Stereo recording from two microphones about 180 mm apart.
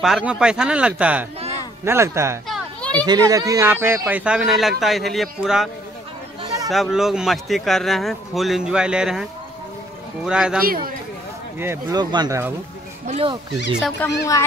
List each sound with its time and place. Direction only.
0.0 s speech: 5° right (ahead or behind)
2.4 s children playing: 5° left (ahead or behind)
3.1 s speech: 20° right (ahead or behind); by 5.7 s centre (ahead or behind)
6.7 s speech: centre (ahead or behind)
10.6 s speech: 55° right (ahead or behind)
11.6 s speech: 15° right (ahead or behind)
13.0 s speech: 35° right (ahead or behind)
14.0 s speech: 10° left (ahead or behind)